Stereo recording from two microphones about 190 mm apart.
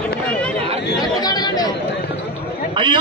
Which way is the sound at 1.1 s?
20° left (ahead or behind).